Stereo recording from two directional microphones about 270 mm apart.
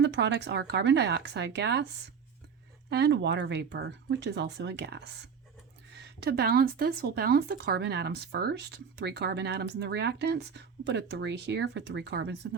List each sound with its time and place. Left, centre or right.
0.0 s speech: right
2.9 s speech: right